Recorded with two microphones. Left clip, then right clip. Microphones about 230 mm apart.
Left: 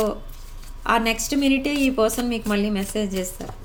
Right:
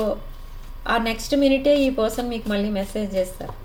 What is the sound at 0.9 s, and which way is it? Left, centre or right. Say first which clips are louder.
Speech: left 1 dB; left.